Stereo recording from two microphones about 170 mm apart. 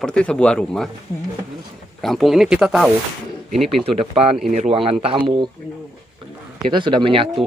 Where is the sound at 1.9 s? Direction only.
Centre (ahead or behind).